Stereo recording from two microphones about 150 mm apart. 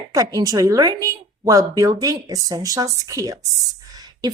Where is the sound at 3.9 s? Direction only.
25° right (ahead or behind).